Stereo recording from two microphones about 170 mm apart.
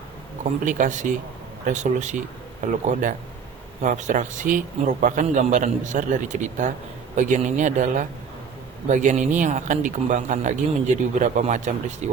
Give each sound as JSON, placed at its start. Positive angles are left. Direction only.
{"t": 0.6, "sound": "a man's voice", "side_deg": -50}